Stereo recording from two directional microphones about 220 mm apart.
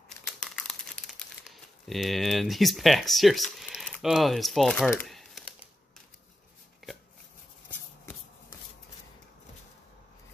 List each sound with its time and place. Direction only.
0.4 s crumpling: 5° left (ahead or behind)
6.8 s a sound: centre (ahead or behind)
8.0 s shuffle: 10° left (ahead or behind)